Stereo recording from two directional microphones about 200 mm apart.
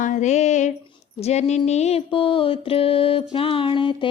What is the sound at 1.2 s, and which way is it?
Mantra, 35° left (ahead or behind).